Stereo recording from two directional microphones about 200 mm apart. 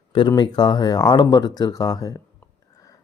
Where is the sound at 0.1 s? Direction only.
25° left (ahead or behind).